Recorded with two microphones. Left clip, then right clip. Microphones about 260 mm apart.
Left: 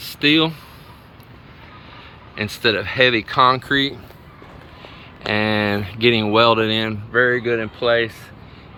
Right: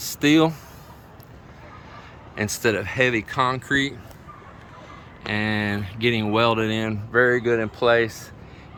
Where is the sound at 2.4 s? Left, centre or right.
Centre.